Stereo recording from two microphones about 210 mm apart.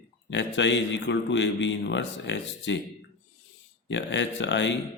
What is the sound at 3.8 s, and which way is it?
Speech, 60° left (ahead or behind).